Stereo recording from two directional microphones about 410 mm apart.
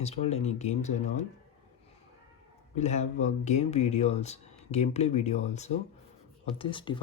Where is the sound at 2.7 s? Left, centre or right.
Centre.